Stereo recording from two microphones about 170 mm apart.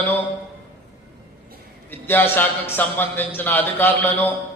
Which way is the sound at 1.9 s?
10° left (ahead or behind).